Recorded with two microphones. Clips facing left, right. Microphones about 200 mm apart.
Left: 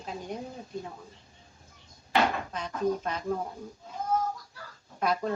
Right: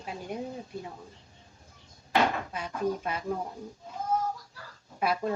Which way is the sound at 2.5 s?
10° right (ahead or behind).